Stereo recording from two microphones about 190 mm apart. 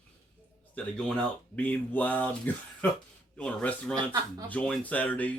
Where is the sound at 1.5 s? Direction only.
10° left (ahead or behind).